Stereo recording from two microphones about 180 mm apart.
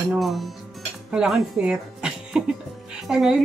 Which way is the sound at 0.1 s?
Centre (ahead or behind).